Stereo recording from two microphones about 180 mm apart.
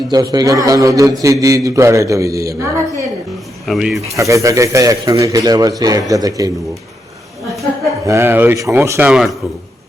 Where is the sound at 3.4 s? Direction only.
Centre (ahead or behind).